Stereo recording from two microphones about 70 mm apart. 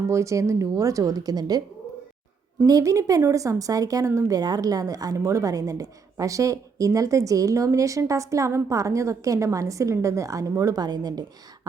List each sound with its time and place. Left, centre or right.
0.1 s a woman's voice: right
2.6 s a woman's voice: right
4.4 s a woman's voice: right